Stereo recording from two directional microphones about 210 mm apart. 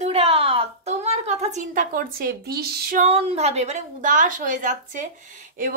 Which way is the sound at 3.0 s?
30° right (ahead or behind).